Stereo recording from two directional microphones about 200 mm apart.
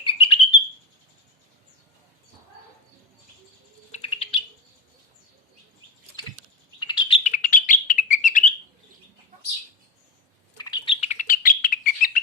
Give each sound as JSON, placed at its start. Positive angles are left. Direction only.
{"t": 0.0, "sound": "bird", "side_deg": 25}
{"t": 3.9, "sound": "bird", "side_deg": 30}
{"t": 6.7, "sound": "bird", "side_deg": 25}
{"t": 7.3, "sound": "bird", "side_deg": 40}
{"t": 10.6, "sound": "bird", "side_deg": 20}
{"t": 11.0, "sound": "bird", "side_deg": 35}